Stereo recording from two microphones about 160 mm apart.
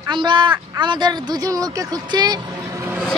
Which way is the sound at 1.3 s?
20° right (ahead or behind).